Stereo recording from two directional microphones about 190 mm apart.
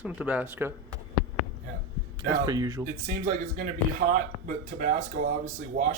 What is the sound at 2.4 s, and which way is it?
Speech, 20° right (ahead or behind).